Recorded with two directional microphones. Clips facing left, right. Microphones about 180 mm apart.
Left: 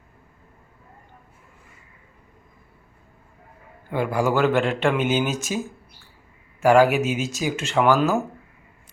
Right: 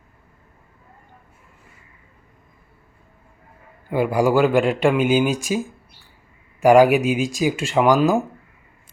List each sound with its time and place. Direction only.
3.8 s speech: 10° right (ahead or behind)